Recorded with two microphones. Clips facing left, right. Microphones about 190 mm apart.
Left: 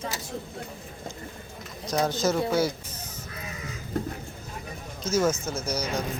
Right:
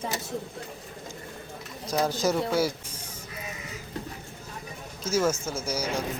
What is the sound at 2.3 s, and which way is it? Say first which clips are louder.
Speech: left 1 dB; centre (ahead or behind).